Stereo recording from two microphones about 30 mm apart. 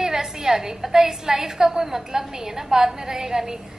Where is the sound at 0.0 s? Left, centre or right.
Right.